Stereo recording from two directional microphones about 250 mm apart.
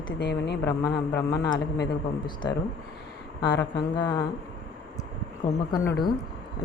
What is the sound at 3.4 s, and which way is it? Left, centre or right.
Speech, centre.